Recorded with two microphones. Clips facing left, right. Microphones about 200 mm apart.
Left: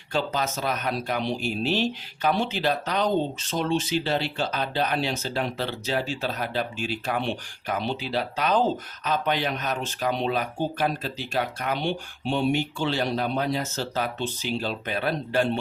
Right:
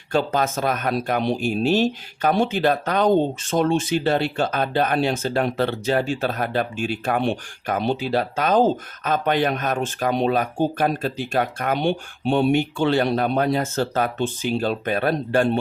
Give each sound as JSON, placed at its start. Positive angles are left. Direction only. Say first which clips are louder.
{"t": 0.1, "sound": "speech", "louder": "right 6 dB", "side_deg": -50}